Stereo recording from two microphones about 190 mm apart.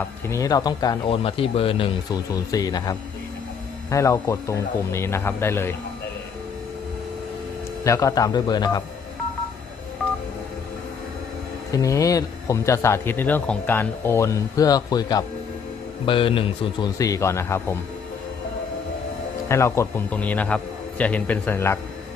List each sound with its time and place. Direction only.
0.3 s speech: 15° left (ahead or behind)
2.3 s speech: 20° left (ahead or behind)
7.9 s speech: 15° left (ahead or behind)
11.7 s speech: 15° left (ahead or behind)
17.0 s speech: 15° left (ahead or behind)
19.5 s speech: 15° left (ahead or behind)